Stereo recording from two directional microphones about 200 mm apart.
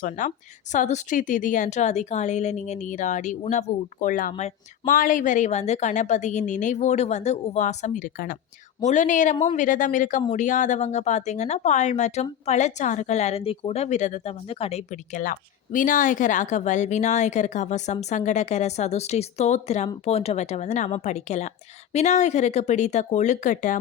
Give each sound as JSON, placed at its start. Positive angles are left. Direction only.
{"t": 0.0, "sound": "speech", "side_deg": 40}